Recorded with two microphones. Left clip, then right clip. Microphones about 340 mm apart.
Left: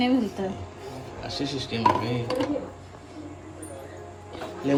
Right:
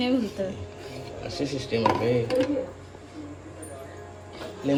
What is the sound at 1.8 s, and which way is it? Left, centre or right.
Speech, centre.